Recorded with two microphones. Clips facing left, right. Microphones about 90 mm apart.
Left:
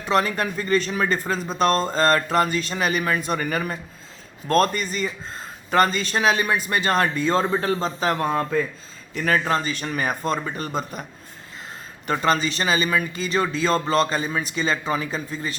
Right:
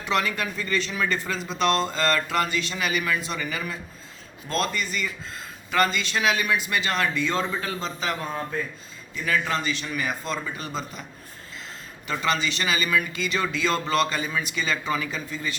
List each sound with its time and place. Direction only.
0.0 s speech: 35° left (ahead or behind)
8.2 s speech: 85° left
9.1 s speech: 45° left (ahead or behind)
9.4 s speech: 35° left (ahead or behind)
12.0 s speech: 40° left (ahead or behind)